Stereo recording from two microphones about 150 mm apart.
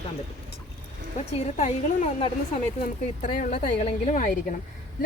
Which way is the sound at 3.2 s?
55° left (ahead or behind).